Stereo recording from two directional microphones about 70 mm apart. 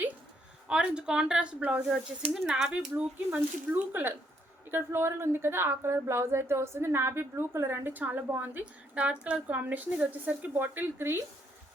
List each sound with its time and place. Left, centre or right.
0.7 s speech: centre
3.3 s a woman's voice: right
4.7 s a woman's voice: right